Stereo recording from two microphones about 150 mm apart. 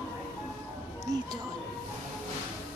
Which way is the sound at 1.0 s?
25° right (ahead or behind).